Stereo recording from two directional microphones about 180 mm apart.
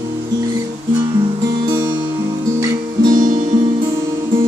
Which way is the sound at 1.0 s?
25° right (ahead or behind).